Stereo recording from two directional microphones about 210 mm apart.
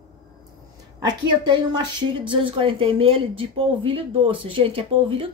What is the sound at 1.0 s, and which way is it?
A woman's voice, 20° right (ahead or behind).